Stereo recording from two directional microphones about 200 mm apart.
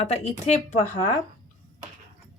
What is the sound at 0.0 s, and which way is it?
Speech, 35° left (ahead or behind).